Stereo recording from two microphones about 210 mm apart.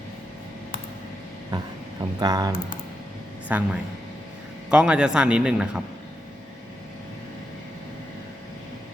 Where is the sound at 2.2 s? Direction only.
20° right (ahead or behind).